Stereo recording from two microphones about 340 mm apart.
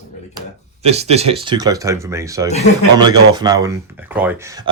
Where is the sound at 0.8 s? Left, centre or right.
Centre.